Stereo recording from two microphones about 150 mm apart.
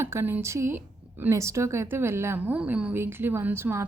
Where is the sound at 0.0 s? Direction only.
15° right (ahead or behind).